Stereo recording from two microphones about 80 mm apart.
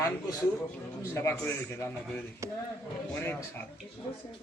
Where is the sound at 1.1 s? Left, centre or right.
Left.